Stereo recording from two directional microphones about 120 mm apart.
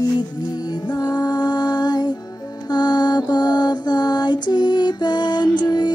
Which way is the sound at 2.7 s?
35° left (ahead or behind).